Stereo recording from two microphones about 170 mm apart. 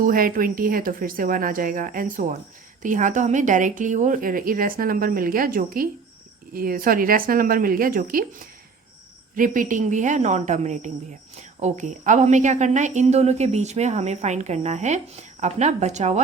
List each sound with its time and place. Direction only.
0.0 s speech: 55° right (ahead or behind)
9.3 s a woman's voice: 50° right (ahead or behind)